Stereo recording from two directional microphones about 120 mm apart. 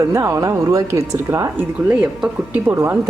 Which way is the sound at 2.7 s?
20° right (ahead or behind).